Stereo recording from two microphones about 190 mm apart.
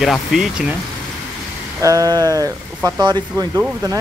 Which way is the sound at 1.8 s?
20° right (ahead or behind).